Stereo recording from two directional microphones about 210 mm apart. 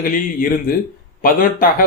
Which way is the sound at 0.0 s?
40° left (ahead or behind).